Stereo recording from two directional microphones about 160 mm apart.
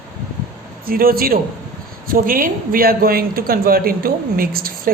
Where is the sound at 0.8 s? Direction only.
65° right (ahead or behind).